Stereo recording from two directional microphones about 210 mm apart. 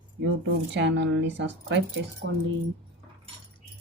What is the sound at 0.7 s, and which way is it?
Speech, 60° right (ahead or behind).